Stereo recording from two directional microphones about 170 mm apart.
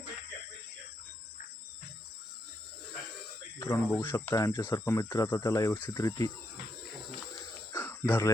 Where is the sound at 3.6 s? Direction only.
15° left (ahead or behind).